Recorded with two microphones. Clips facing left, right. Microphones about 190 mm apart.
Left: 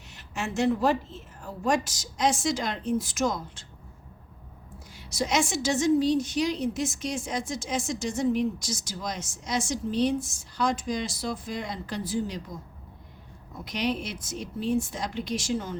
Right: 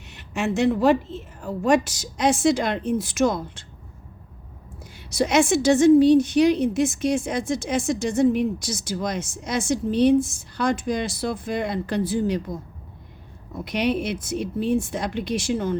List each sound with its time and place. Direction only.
0.1 s a woman's voice: 65° right (ahead or behind)
4.9 s a woman's voice: 60° right (ahead or behind)
13.7 s a woman's voice: 60° right (ahead or behind)